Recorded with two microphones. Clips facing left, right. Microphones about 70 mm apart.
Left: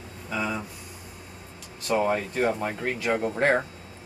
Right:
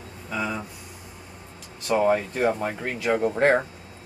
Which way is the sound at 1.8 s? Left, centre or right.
Centre.